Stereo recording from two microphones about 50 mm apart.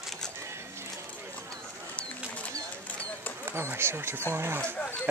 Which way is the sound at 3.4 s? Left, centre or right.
Right.